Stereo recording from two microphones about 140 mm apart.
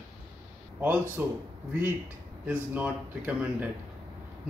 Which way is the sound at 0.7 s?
15° right (ahead or behind).